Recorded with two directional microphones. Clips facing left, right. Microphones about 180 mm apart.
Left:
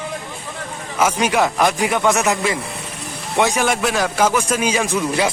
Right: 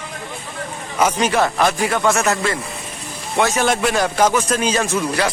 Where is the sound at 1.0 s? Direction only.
10° left (ahead or behind).